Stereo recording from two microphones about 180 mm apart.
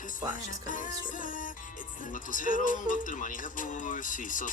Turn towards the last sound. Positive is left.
turn(degrees=45)  # may be behind; listen again after turning